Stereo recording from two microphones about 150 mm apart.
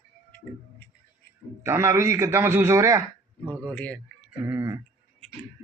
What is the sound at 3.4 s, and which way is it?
Speech, 10° left (ahead or behind).